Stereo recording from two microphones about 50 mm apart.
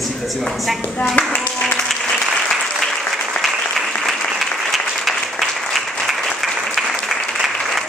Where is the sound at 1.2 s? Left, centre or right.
Left.